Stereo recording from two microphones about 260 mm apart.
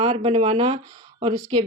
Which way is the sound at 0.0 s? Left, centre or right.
Right.